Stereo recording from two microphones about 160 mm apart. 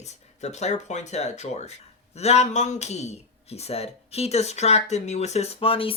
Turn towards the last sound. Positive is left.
turn(degrees=35)  # may be behind; listen again after turning